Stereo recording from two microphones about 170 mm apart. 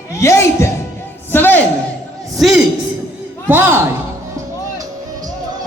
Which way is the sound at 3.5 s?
15° right (ahead or behind).